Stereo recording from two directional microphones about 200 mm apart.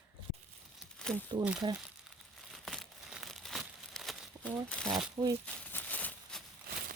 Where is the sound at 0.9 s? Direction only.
5° left (ahead or behind).